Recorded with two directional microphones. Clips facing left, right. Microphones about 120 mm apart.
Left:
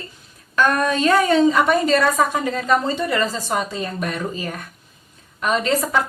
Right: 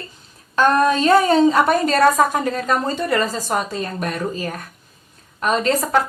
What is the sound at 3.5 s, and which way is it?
Speech, 45° right (ahead or behind).